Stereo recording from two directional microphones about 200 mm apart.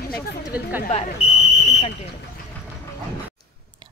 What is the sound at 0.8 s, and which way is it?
Speech, 30° left (ahead or behind).